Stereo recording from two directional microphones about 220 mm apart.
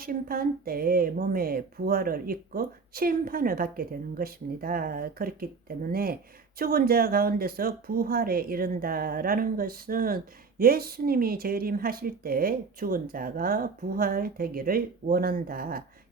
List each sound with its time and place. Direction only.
0.0 s a woman's voice: 40° right (ahead or behind)